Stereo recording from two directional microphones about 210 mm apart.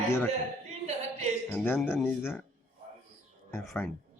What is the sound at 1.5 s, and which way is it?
Speech, 10° left (ahead or behind).